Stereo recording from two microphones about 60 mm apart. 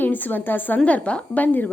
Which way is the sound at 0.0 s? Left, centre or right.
Left.